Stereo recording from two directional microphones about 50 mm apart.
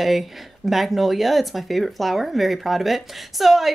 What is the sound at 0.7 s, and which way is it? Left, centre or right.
Speech, centre.